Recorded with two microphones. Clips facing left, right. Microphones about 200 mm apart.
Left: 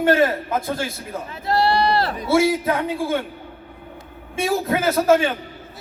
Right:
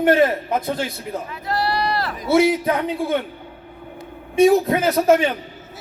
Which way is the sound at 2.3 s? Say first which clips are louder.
Right 2 dB; 20° right (ahead or behind).